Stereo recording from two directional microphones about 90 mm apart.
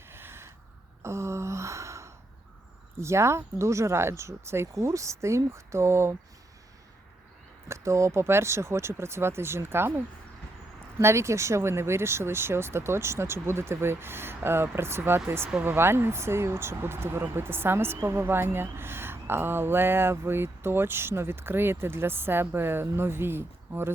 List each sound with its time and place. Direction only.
0.1 s a sound: 25° right (ahead or behind)
3.0 s speech: 30° right (ahead or behind)
7.7 s speech: 35° right (ahead or behind)
11.0 s speech: 30° right (ahead or behind)